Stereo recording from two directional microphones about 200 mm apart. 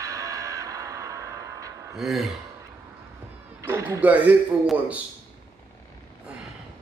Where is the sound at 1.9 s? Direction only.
Centre (ahead or behind).